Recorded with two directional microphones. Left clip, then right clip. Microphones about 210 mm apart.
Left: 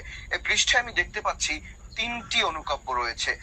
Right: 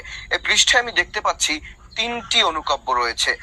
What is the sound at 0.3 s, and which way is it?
A woman's voice, 35° right (ahead or behind).